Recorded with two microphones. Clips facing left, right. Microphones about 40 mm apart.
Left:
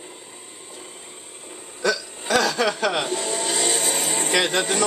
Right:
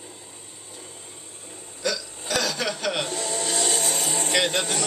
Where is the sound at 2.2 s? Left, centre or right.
Left.